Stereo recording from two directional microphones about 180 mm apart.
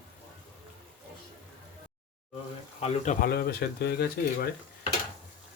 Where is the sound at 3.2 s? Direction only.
60° left (ahead or behind).